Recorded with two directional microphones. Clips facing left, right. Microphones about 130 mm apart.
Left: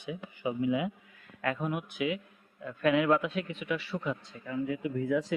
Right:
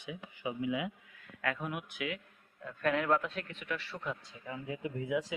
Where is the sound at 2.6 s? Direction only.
5° left (ahead or behind).